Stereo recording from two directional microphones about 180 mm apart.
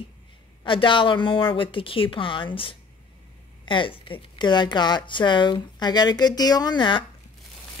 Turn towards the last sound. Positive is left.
turn(degrees=25)  # may be behind; listen again after turning